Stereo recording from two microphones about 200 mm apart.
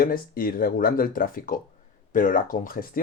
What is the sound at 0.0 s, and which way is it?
Speech, 45° left (ahead or behind).